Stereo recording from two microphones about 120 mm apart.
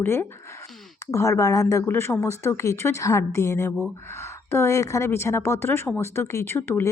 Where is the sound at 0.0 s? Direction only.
20° left (ahead or behind).